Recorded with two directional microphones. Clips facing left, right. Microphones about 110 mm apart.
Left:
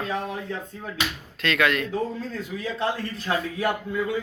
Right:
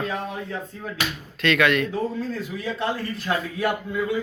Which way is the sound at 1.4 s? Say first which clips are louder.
Right 3 dB; 30° left (ahead or behind).